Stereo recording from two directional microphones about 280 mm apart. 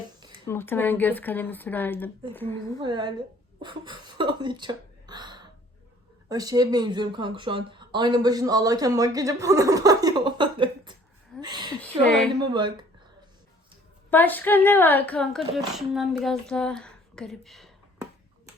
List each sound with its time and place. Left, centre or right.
0.3 s speech: centre
2.8 s a woman's voice: centre
11.3 s a sound: centre
11.8 s a sound: centre
12.4 s speech: centre
14.1 s speech: centre